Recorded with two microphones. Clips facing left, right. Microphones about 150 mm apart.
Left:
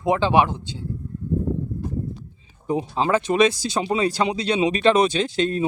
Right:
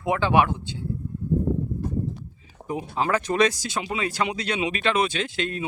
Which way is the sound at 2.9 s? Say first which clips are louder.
Left 2 dB; 25° left (ahead or behind).